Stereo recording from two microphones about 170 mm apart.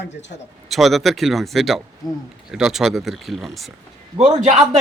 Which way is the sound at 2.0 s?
25° left (ahead or behind).